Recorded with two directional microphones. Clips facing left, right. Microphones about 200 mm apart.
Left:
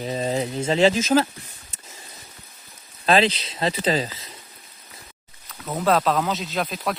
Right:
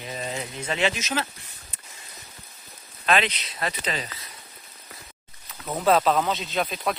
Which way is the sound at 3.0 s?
30° left (ahead or behind).